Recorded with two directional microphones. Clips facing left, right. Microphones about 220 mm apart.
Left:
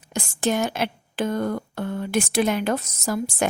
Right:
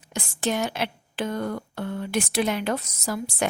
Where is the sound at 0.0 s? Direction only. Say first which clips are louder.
Left 3 dB; 45° left (ahead or behind).